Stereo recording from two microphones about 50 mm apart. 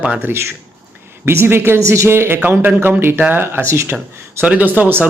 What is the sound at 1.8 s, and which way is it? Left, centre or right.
A woman's voice, right.